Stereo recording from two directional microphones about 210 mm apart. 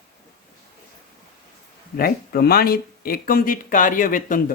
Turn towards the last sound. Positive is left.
turn(degrees=40)  # may be behind; listen again after turning